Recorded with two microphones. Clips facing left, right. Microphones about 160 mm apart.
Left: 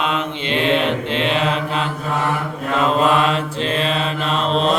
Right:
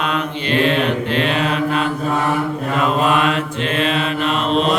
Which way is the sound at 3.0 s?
30° left (ahead or behind).